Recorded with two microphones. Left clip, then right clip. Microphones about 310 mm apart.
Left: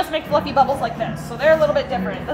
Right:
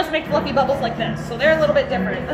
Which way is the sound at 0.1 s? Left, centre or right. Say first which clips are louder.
Even; left.